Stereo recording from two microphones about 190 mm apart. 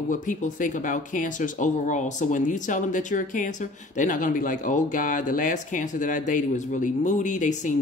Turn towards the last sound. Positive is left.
turn(degrees=40)  # may be behind; listen again after turning